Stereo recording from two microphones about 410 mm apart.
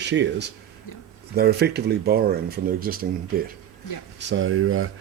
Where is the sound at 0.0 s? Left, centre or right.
Right.